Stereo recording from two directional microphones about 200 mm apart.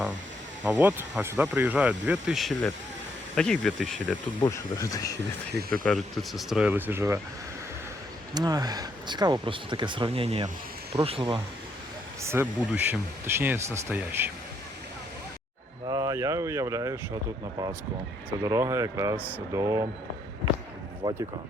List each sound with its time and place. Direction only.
0.6 s speech: 10° right (ahead or behind)
4.4 s speech: 15° left (ahead or behind)
5.5 s speech: 50° right (ahead or behind)
5.8 s speech: centre (ahead or behind)
8.4 s speech: 20° right (ahead or behind)
12.2 s speech: 10° right (ahead or behind)
15.9 s speech: 20° right (ahead or behind)
18.4 s speech: 15° right (ahead or behind)
21.0 s speech: 15° right (ahead or behind)